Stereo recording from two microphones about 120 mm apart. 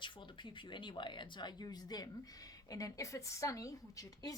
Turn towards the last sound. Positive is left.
turn(degrees=30)  # may be behind; listen again after turning